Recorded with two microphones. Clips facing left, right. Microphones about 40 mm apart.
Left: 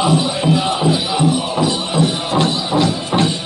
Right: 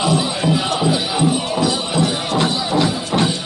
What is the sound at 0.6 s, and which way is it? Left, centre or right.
Music, left.